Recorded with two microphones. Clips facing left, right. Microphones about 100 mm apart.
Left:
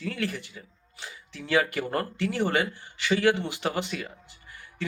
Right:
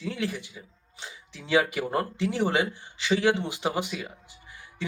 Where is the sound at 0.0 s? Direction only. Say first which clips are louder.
Even; 15° right (ahead or behind).